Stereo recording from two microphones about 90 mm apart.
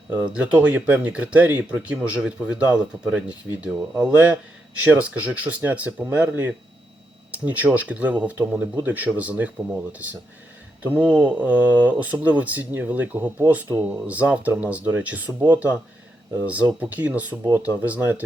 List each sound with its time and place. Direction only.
0.1 s speech: 15° right (ahead or behind)